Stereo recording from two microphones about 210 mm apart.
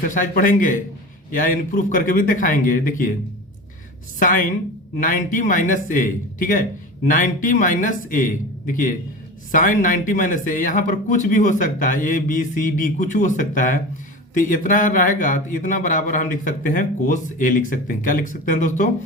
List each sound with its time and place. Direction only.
0.0 s a man's voice: 40° left (ahead or behind)
4.2 s a man's voice: 40° left (ahead or behind)